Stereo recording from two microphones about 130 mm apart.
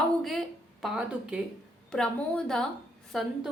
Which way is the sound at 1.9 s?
5° left (ahead or behind).